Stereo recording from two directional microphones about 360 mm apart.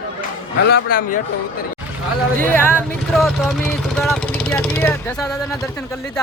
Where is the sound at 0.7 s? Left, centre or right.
Left.